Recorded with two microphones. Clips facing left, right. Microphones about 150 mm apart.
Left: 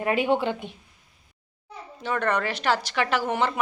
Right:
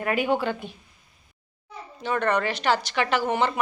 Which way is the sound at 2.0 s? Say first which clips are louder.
Right 1 dB; centre (ahead or behind).